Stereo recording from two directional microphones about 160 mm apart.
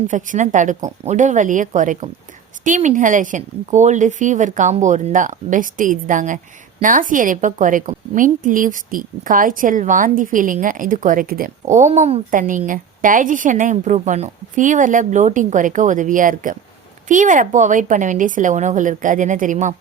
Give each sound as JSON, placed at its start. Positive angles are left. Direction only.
{"t": 0.1, "sound": "a woman's voice", "side_deg": -55}
{"t": 11.7, "sound": "a woman's voice", "side_deg": -50}